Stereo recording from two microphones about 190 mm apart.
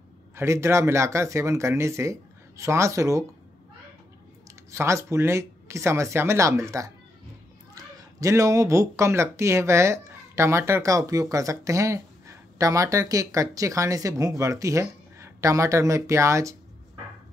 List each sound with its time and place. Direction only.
0.4 s speech: 15° right (ahead or behind)
4.5 s speech: 15° right (ahead or behind)